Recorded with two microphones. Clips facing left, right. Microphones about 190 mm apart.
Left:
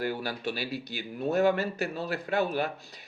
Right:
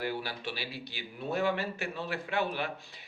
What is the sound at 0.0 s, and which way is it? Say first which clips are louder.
Speech: left 4 dB; 45° left (ahead or behind).